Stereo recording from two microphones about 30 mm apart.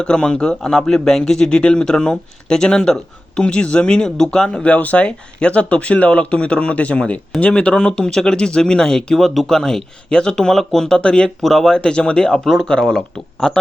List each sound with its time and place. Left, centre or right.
0.0 s speech: left
0.4 s a man's voice: centre
1.2 s speech: left
3.4 s speech: left
9.1 s speech: centre
9.5 s a man's voice: centre
10.6 s a man's voice: centre
10.8 s speech: left
11.4 s a man's voice: centre
11.8 s speech: left
13.4 s a man's voice: centre